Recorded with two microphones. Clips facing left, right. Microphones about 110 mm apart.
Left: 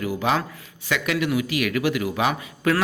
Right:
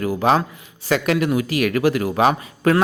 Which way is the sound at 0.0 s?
40° right (ahead or behind).